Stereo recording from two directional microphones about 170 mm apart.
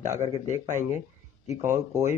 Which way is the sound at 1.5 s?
15° right (ahead or behind).